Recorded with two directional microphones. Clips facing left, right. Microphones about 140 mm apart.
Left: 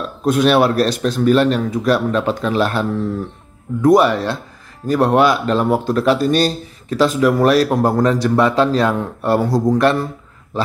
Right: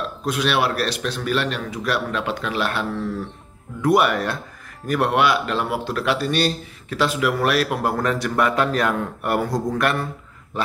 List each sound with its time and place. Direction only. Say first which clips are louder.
0.2 s speech: left 8 dB; 45° left (ahead or behind)